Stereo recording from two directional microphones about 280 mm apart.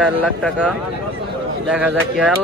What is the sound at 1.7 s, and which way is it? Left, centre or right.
Speech, centre.